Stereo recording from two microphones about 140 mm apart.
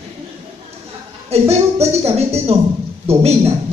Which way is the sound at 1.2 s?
50° right (ahead or behind).